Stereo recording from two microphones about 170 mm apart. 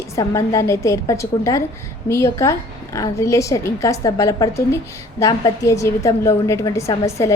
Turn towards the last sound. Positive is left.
turn(degrees=15)  # may be behind; listen again after turning